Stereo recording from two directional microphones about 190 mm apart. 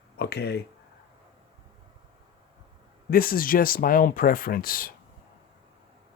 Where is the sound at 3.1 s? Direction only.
50° left (ahead or behind).